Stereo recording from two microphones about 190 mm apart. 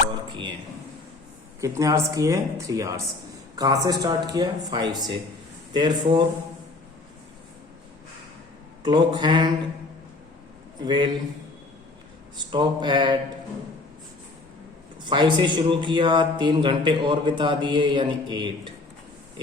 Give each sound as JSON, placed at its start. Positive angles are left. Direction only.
{"t": 1.6, "sound": "speech", "side_deg": -15}
{"t": 8.8, "sound": "speech", "side_deg": -25}
{"t": 10.8, "sound": "speech", "side_deg": -25}
{"t": 12.5, "sound": "speech", "side_deg": -25}
{"t": 15.0, "sound": "speech", "side_deg": -25}